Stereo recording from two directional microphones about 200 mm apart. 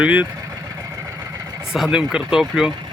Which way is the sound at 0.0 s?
5° right (ahead or behind).